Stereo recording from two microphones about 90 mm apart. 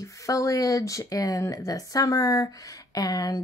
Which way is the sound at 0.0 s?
35° left (ahead or behind).